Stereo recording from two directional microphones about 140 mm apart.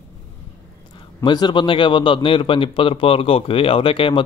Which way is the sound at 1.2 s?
35° left (ahead or behind).